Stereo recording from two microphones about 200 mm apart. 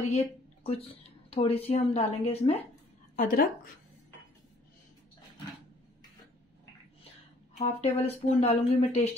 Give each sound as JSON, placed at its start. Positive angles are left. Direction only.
{"t": 0.7, "sound": "speech", "side_deg": 30}
{"t": 3.2, "sound": "speech", "side_deg": 50}
{"t": 7.5, "sound": "speech", "side_deg": 30}